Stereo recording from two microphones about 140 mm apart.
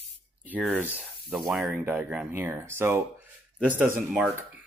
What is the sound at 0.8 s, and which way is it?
Speech, 10° right (ahead or behind).